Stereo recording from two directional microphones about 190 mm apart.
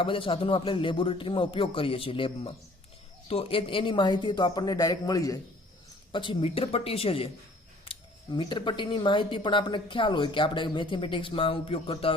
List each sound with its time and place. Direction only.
0.0 s speech: 25° left (ahead or behind)